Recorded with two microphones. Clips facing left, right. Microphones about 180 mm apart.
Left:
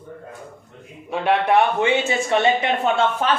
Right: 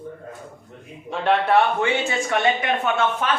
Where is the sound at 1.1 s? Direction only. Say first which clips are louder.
Left 1 dB; 10° left (ahead or behind).